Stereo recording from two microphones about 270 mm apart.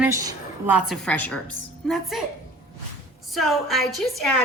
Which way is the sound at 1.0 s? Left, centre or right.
Centre.